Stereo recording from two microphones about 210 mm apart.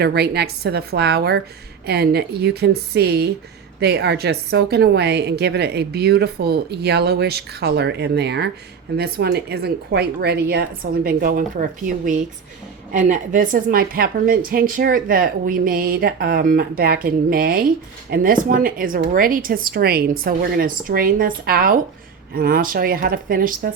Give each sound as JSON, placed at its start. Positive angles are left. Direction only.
{"t": 0.0, "sound": "a woman's voice", "side_deg": -50}